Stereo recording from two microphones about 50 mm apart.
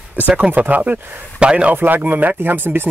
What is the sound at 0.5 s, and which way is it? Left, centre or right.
Speech, right.